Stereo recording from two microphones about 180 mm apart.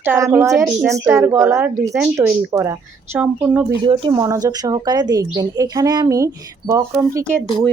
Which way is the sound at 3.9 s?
30° right (ahead or behind).